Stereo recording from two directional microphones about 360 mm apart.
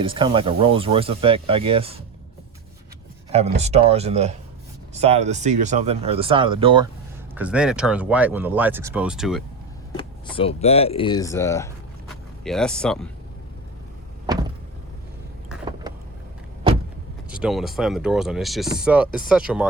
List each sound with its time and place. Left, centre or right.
0.0 s speech: centre
3.3 s speech: centre
7.3 s speech: centre
10.0 s speech: centre
15.4 s a sound: centre
17.2 s speech: centre